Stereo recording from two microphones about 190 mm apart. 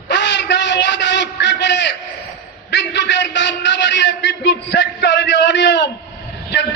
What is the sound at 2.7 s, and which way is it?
A man's voice, 65° left (ahead or behind).